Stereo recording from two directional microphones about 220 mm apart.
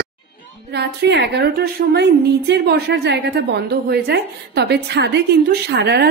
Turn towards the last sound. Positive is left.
turn(degrees=-50)  # may be behind; listen again after turning